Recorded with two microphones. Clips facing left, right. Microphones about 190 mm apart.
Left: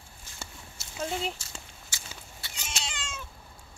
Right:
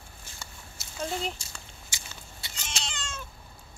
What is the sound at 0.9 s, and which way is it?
Speech, 5° left (ahead or behind).